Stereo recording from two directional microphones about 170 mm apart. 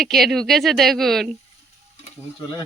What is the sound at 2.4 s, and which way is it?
Dog, 25° left (ahead or behind).